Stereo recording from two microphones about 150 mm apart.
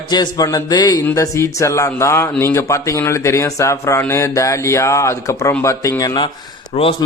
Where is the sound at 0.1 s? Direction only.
25° left (ahead or behind).